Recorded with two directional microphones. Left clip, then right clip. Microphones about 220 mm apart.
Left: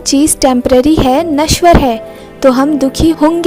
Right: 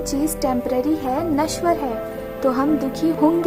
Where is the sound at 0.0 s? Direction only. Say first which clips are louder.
Left 12 dB; 35° left (ahead or behind).